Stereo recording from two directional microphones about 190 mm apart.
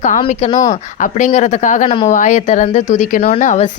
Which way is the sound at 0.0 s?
40° left (ahead or behind).